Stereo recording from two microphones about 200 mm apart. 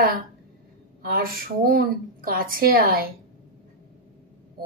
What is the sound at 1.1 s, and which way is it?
A woman's voice, 45° right (ahead or behind).